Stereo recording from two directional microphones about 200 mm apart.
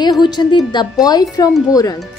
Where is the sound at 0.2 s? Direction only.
20° left (ahead or behind).